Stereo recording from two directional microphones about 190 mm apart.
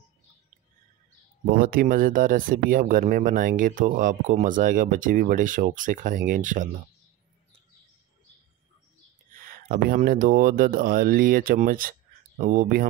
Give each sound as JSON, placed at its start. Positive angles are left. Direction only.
{"t": 1.5, "sound": "speech", "side_deg": -50}
{"t": 9.3, "sound": "speech", "side_deg": -50}